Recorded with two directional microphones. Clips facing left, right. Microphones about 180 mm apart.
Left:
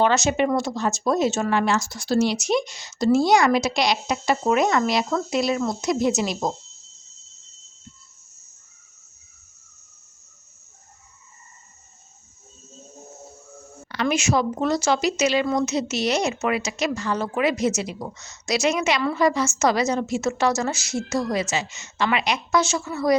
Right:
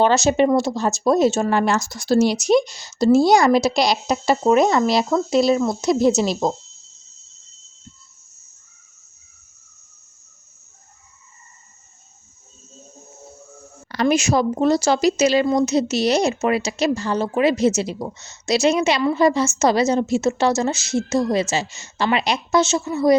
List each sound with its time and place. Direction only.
0.0 s a woman's voice: 30° right (ahead or behind)
13.8 s a woman's voice: 40° right (ahead or behind); by 23.1 s 25° right (ahead or behind)